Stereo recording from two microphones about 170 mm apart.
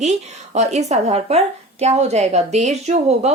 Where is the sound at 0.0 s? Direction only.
40° right (ahead or behind).